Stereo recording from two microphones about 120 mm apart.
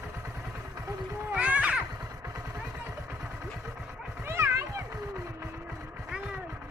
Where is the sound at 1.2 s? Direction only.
10° right (ahead or behind).